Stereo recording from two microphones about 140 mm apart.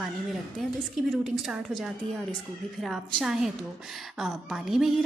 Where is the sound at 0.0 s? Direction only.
Centre (ahead or behind).